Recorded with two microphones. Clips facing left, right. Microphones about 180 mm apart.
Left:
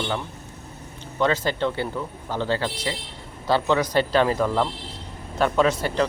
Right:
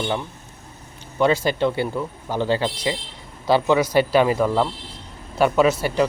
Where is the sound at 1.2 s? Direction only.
10° right (ahead or behind).